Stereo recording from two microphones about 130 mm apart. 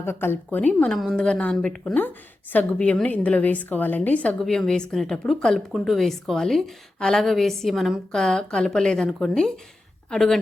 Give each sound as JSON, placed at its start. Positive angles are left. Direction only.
{"t": 0.0, "sound": "a woman's voice", "side_deg": 20}